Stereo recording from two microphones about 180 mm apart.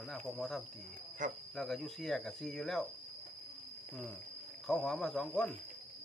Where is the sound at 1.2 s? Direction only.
45° right (ahead or behind).